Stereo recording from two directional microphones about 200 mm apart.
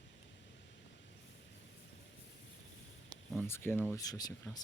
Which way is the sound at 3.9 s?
20° left (ahead or behind).